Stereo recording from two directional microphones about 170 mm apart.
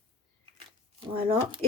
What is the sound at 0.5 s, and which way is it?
Shuffling cards, 35° right (ahead or behind).